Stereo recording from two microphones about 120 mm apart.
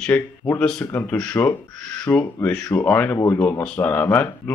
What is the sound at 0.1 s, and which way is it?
Speech, 15° left (ahead or behind).